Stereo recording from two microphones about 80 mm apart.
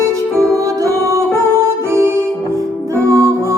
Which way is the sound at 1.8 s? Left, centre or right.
Right.